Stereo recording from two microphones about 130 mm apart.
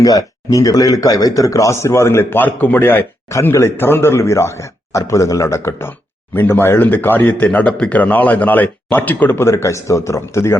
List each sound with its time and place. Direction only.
0.0 s speech: 30° left (ahead or behind)